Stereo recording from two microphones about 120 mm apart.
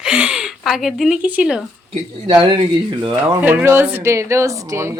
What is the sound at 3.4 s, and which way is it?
Speech, 15° right (ahead or behind).